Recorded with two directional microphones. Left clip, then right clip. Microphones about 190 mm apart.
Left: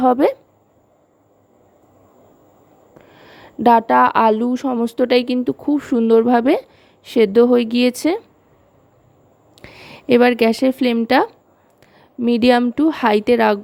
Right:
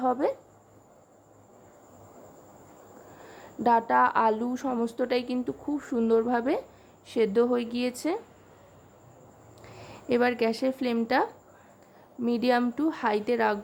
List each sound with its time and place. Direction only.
0.0 s a woman's voice: 45° left (ahead or behind)
3.2 s speech: 40° left (ahead or behind)
9.6 s a woman's voice: 45° left (ahead or behind)